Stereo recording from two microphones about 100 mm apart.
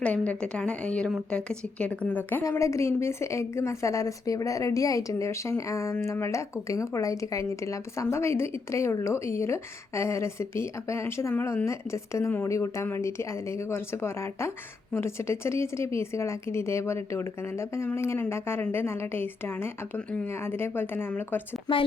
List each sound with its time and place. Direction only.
0.0 s a woman's voice: 10° left (ahead or behind)
2.4 s a woman's voice: 30° left (ahead or behind)